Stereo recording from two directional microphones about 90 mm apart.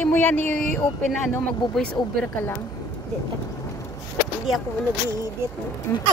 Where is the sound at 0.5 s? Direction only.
10° left (ahead or behind).